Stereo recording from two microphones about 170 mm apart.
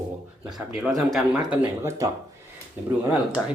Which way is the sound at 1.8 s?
15° right (ahead or behind).